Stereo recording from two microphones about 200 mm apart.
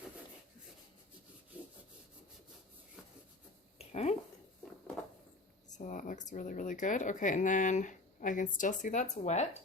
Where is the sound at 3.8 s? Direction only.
30° left (ahead or behind).